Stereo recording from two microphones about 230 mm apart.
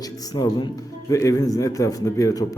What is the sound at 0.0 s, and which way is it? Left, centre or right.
Music, centre.